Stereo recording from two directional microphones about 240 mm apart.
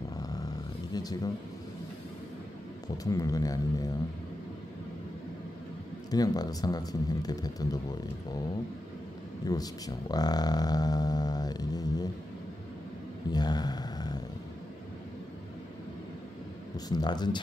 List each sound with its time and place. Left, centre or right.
0.9 s speech: centre
3.0 s speech: centre
6.0 s speech: centre
9.4 s speech: centre
13.3 s a sound: centre
16.7 s speech: centre